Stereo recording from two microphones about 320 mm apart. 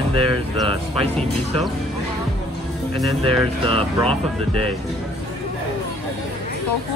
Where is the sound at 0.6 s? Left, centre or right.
Centre.